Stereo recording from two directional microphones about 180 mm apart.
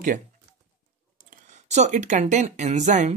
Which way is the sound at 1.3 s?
40° right (ahead or behind).